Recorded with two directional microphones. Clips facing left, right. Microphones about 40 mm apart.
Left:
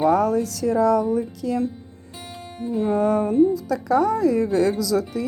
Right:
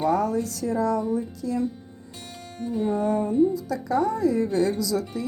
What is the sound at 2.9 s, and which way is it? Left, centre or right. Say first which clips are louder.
Speech: left 5 dB; left.